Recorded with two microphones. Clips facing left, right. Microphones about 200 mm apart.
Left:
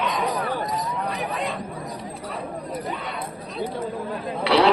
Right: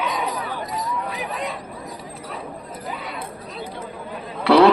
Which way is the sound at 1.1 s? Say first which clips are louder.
Left 1 dB; centre (ahead or behind).